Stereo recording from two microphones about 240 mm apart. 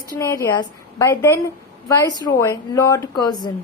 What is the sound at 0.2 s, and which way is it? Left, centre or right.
A woman's voice, centre.